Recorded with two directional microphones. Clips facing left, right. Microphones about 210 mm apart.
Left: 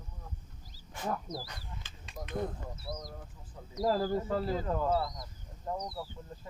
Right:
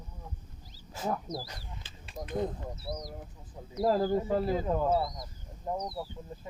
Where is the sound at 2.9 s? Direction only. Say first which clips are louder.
Right 2 dB; 20° right (ahead or behind).